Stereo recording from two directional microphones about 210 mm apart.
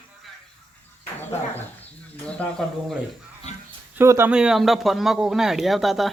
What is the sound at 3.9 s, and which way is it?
Speech, 10° right (ahead or behind).